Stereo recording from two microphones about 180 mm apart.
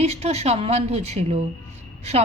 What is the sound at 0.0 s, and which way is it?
A woman's voice, 35° right (ahead or behind).